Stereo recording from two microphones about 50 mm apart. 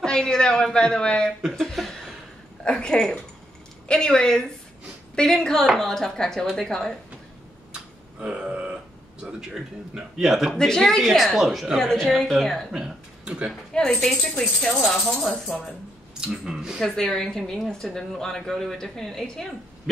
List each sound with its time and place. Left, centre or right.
0.0 s a man's voice: centre
1.6 s a sound: centre
2.6 s speech: centre
7.7 s burping: right
9.2 s speech: centre
11.8 s speech: centre
13.2 s speech: centre
13.7 s speech: centre
14.8 s speech: centre
16.3 s speech: centre
16.8 s speech: centre